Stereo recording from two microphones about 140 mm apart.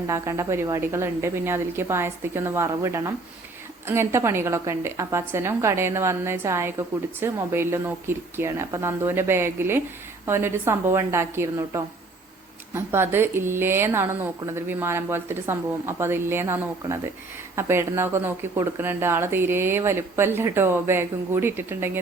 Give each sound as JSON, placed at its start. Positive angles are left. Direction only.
{"t": 0.1, "sound": "a woman's voice", "side_deg": -20}